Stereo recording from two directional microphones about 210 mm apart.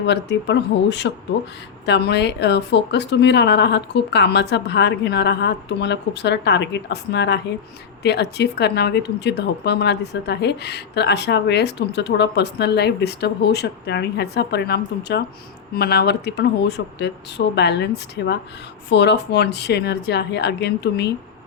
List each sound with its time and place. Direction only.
0.0 s a woman's voice: 55° left (ahead or behind)